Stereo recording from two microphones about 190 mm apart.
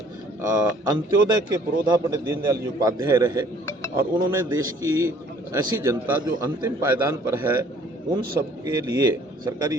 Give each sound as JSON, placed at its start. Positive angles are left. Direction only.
{"t": 0.9, "sound": "a man's voice", "side_deg": -20}